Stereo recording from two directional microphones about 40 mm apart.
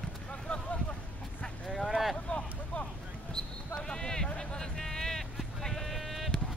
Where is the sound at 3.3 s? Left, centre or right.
Centre.